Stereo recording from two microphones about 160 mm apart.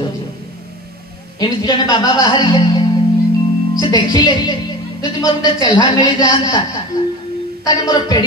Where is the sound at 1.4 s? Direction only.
25° left (ahead or behind).